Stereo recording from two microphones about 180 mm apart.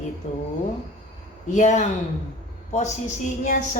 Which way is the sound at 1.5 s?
45° left (ahead or behind).